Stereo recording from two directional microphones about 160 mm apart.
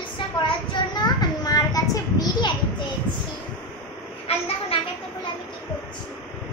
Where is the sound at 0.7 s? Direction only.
25° left (ahead or behind).